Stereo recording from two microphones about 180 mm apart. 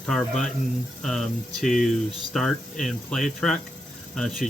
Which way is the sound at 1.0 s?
Centre (ahead or behind).